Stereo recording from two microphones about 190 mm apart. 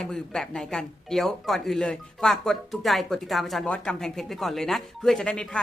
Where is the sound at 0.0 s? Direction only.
Centre (ahead or behind).